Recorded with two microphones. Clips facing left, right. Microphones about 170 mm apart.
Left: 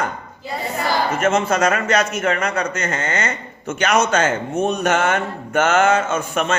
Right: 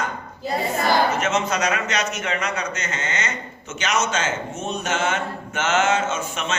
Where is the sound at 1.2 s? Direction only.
50° left (ahead or behind).